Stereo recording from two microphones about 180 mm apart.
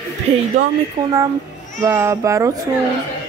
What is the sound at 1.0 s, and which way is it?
A woman's voice, 25° right (ahead or behind).